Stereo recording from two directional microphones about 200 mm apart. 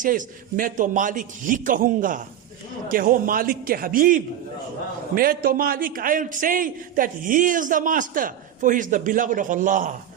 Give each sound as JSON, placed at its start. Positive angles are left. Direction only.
{"t": 0.0, "sound": "a man's voice", "side_deg": -40}